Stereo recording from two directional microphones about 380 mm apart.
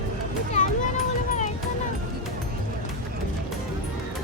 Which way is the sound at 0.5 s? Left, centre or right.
Centre.